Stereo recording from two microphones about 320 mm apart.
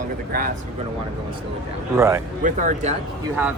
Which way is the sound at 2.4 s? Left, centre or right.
Right.